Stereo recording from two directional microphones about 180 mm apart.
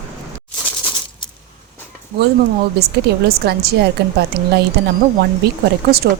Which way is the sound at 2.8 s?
60° right (ahead or behind).